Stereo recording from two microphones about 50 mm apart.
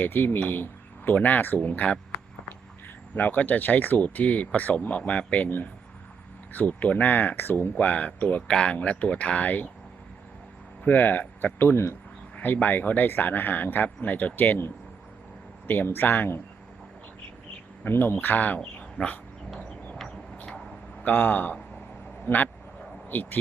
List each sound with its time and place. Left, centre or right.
0.0 s speech: left
0.4 s a sound: left
1.1 s speech: left
3.2 s speech: left
6.5 s speech: left
8.4 s speech: left
10.8 s speech: left
12.4 s speech: left
17.9 s speech: left
18.2 s speech: left
21.0 s speech: left
22.3 s speech: left
23.0 s speech: left